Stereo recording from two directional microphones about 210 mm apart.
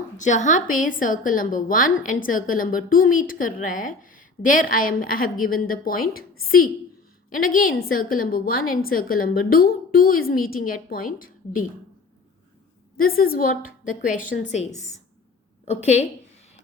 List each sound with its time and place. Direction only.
0.2 s a woman's voice: 35° left (ahead or behind)
7.3 s a woman's voice: 40° left (ahead or behind)
13.0 s a woman's voice: 45° left (ahead or behind)